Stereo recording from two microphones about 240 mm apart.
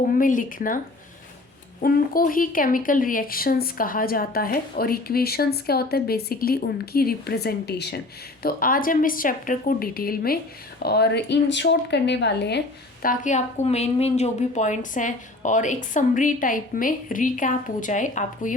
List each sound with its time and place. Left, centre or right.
0.0 s speech: left
1.8 s speech: left